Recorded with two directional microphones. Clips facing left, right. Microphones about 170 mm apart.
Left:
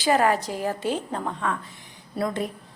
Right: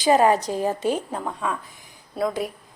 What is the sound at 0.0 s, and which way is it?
A woman's voice, 20° right (ahead or behind).